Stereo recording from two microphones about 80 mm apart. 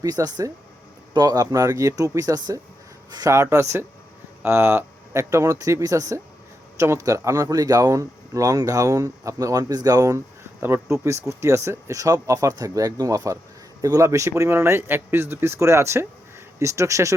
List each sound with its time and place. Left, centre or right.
0.0 s speech: right
3.3 s speech: right